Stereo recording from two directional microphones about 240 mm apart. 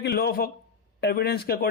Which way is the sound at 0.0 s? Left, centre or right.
Left.